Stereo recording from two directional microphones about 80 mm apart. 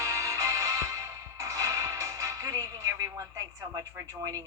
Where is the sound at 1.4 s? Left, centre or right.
Right.